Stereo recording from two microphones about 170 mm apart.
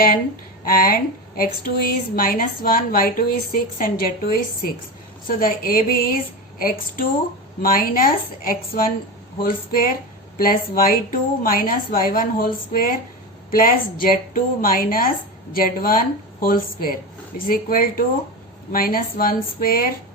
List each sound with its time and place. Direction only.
0.6 s speech: 60° left (ahead or behind)